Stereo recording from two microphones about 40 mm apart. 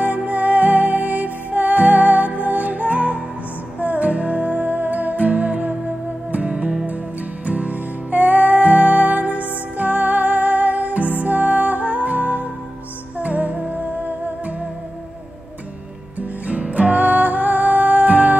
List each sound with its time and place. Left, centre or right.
0.2 s music: right
6.5 s music: centre
7.4 s music: right
16.2 s music: right